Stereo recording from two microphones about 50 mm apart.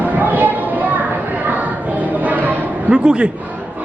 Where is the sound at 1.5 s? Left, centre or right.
Right.